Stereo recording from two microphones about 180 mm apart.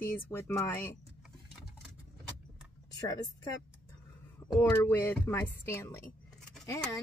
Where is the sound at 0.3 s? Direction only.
15° left (ahead or behind).